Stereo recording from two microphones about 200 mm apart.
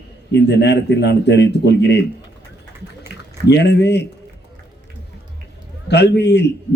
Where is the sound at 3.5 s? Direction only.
55° left (ahead or behind).